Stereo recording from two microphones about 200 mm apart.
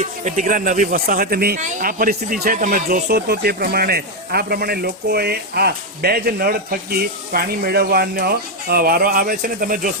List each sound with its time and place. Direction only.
0.0 s speech: 40° right (ahead or behind)